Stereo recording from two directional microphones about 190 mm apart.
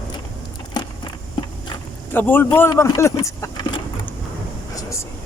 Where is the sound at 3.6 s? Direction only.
25° left (ahead or behind).